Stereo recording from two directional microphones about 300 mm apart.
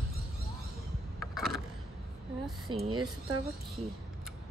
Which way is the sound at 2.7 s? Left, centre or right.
Centre.